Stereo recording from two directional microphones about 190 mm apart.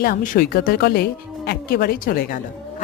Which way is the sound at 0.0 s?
50° left (ahead or behind).